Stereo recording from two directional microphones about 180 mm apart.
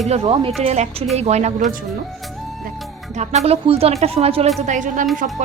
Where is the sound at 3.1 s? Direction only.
40° right (ahead or behind).